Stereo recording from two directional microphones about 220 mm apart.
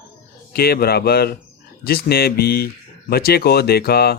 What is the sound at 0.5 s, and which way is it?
Speech, 45° left (ahead or behind).